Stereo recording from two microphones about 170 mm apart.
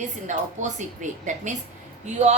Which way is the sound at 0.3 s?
45° right (ahead or behind).